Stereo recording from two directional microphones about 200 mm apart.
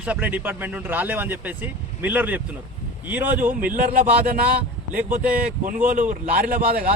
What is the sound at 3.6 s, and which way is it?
Speech, 45° right (ahead or behind).